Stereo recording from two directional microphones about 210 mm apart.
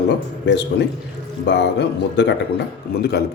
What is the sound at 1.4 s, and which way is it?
A man's voice, 55° left (ahead or behind).